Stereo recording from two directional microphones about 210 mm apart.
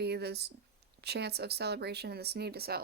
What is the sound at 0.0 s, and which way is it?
A woman's voice, 50° right (ahead or behind).